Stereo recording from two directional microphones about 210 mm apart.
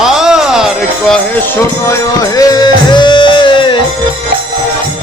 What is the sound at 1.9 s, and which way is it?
Music, 15° left (ahead or behind).